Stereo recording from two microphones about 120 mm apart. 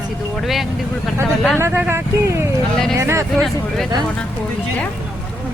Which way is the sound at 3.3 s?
Centre (ahead or behind).